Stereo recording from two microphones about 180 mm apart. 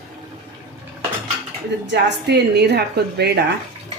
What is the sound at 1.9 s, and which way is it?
A woman's voice, 70° right (ahead or behind).